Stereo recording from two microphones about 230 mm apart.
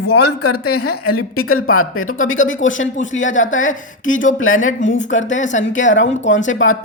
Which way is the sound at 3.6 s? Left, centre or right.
Left.